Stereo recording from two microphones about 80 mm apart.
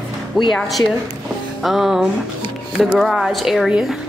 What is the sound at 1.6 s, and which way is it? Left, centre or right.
A woman's voice, centre.